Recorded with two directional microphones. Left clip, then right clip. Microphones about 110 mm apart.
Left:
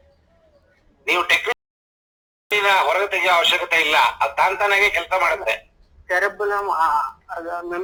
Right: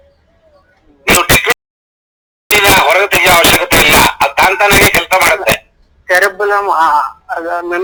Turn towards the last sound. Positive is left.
turn(degrees=-50)  # may be behind; listen again after turning